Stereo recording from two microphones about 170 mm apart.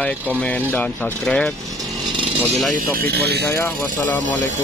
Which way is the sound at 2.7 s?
55° right (ahead or behind).